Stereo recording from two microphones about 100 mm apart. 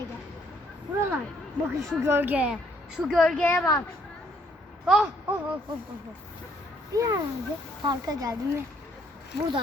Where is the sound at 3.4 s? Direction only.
15° left (ahead or behind).